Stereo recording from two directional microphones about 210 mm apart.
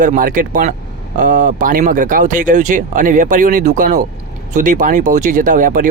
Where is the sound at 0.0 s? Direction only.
40° right (ahead or behind).